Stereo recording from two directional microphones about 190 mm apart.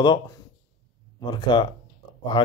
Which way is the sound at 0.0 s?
25° left (ahead or behind).